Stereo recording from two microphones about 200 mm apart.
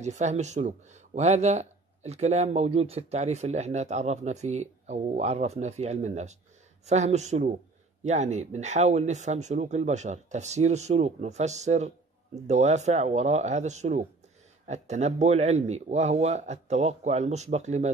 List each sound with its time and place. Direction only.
0.0 s speech: 35° right (ahead or behind)